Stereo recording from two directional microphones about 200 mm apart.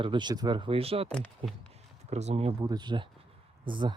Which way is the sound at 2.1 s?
35° right (ahead or behind).